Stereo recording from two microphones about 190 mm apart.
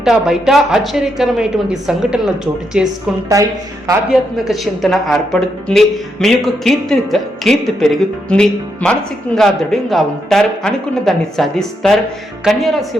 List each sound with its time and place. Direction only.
0.0 s speech: centre (ahead or behind)
3.3 s speech: 15° right (ahead or behind)
4.1 s speech: centre (ahead or behind)